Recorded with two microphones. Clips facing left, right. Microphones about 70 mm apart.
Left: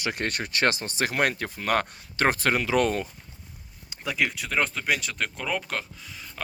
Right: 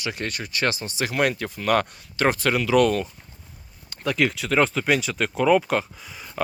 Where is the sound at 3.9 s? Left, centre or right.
Centre.